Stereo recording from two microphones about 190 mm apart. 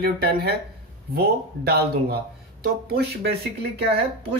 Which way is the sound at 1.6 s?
55° right (ahead or behind).